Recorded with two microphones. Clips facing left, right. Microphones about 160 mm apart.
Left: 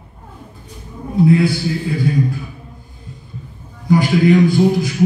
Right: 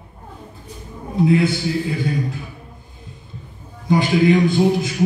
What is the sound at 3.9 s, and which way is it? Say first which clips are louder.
A man's voice: left 2 dB; 25° right (ahead or behind).